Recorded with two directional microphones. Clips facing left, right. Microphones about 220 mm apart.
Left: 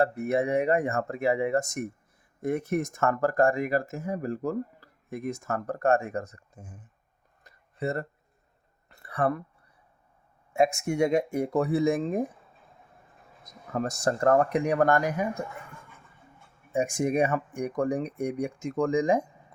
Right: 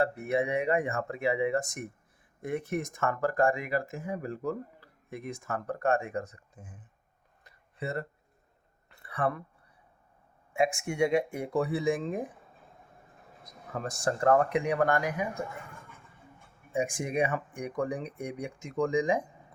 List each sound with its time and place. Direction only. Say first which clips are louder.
0.0 s speech: left 3 dB; 45° left (ahead or behind)
7.4 s a sound: left 6 dB; 45° left (ahead or behind)
10.5 s speech: left 4 dB; 40° left (ahead or behind)
13.4 s speech: left 6 dB; 40° left (ahead or behind)
16.7 s speech: left 4 dB; 45° left (ahead or behind)